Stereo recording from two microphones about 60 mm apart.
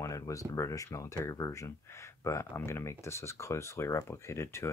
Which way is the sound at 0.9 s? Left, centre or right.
Left.